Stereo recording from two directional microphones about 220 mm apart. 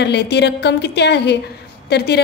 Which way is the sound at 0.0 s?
50° left (ahead or behind).